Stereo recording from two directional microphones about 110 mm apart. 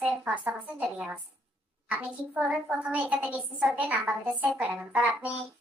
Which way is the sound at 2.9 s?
15° right (ahead or behind).